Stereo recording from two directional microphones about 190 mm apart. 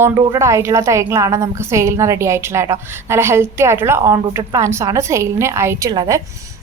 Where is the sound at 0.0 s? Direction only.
15° right (ahead or behind).